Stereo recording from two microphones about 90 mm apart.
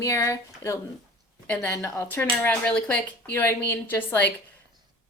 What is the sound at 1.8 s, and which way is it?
Speech, 35° left (ahead or behind).